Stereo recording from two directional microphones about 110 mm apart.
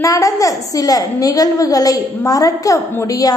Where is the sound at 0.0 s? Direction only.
30° left (ahead or behind).